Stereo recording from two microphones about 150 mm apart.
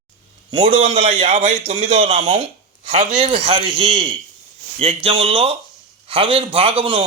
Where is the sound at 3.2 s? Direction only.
40° right (ahead or behind).